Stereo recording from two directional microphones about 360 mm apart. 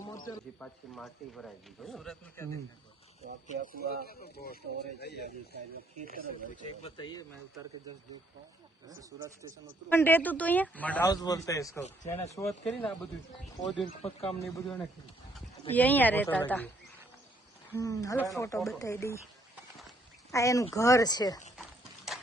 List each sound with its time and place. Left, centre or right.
0.3 s speech: centre
3.4 s speech: right
4.1 s speech: left
6.0 s speech: right
6.8 s speech: centre
9.0 s speech: centre
9.9 s speech: centre
15.7 s speech: centre
20.3 s speech: centre
22.1 s clip-clop: centre